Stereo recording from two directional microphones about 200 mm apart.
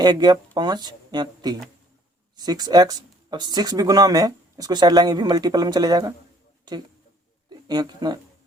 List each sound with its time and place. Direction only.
0.0 s speech: 20° right (ahead or behind)
7.7 s speech: 20° right (ahead or behind)